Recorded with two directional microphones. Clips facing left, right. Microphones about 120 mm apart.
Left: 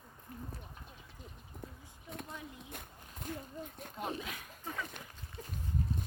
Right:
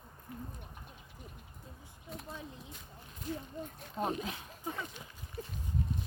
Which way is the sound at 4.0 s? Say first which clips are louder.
Right 5 dB; 35° right (ahead or behind).